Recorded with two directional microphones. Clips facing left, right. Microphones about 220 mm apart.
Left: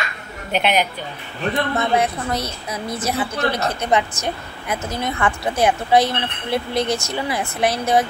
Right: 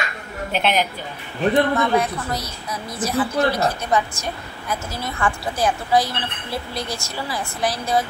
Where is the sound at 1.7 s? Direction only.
25° left (ahead or behind).